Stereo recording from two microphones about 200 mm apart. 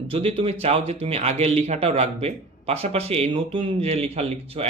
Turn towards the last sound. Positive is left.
turn(degrees=-30)  # may be behind; listen again after turning